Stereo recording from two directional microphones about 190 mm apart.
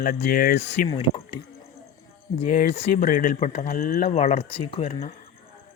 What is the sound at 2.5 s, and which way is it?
Speech, 50° left (ahead or behind).